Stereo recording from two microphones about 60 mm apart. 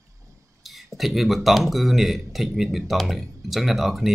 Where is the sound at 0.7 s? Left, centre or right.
Centre.